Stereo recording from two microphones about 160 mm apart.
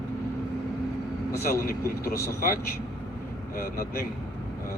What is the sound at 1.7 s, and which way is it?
Speech, 65° left (ahead or behind).